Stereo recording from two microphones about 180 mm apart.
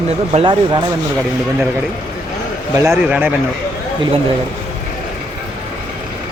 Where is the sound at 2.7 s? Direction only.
15° right (ahead or behind).